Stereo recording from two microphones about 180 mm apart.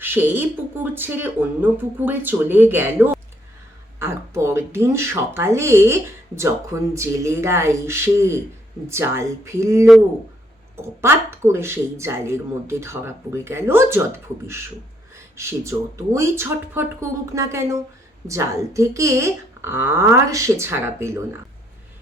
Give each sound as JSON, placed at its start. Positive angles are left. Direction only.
{"t": 0.0, "sound": "speech", "side_deg": -10}
{"t": 15.1, "sound": "a sound", "side_deg": -15}
{"t": 16.1, "sound": "speech", "side_deg": -15}